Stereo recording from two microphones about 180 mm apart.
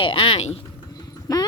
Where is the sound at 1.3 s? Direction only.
20° left (ahead or behind).